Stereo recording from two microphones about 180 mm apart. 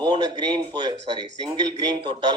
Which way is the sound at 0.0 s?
25° right (ahead or behind).